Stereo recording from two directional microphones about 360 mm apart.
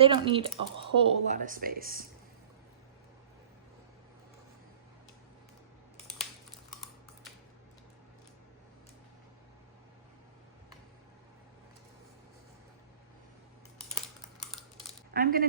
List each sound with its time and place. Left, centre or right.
0.0 s speech: centre
15.1 s speech: right